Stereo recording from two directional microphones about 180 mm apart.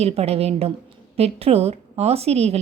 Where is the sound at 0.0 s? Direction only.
35° right (ahead or behind).